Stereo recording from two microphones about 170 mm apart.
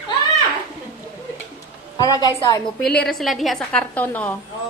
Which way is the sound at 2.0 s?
20° left (ahead or behind).